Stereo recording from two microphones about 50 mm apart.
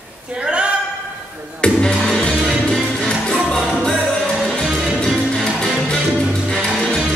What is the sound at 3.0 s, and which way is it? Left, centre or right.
Music, centre.